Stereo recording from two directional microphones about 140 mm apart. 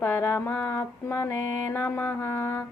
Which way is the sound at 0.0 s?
20° left (ahead or behind).